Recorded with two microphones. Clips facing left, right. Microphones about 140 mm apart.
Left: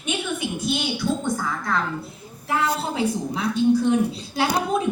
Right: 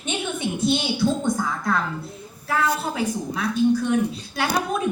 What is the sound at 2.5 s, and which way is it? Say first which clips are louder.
A woman's voice: even; 25° left (ahead or behind).